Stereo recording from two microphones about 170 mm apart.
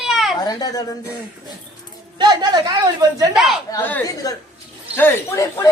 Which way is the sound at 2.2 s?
25° right (ahead or behind).